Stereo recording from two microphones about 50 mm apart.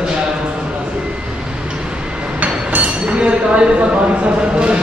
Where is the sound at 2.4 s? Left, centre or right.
Right.